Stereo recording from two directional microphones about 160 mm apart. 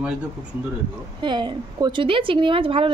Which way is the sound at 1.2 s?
30° right (ahead or behind).